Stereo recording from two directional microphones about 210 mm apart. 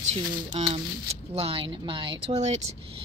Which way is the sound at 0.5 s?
25° right (ahead or behind).